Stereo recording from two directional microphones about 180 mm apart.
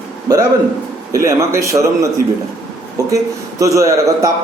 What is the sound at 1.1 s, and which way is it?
Speech, 15° right (ahead or behind).